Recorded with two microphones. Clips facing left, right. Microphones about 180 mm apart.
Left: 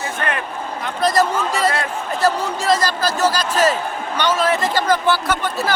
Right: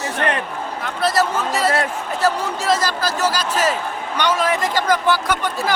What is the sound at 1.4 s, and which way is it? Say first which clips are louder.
Speech: even; 5° right (ahead or behind).